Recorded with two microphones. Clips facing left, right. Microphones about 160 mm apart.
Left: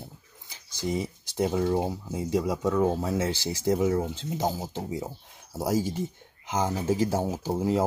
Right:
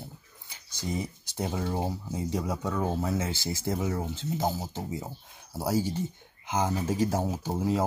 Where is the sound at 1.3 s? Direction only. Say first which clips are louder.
Left 6 dB; 10° left (ahead or behind).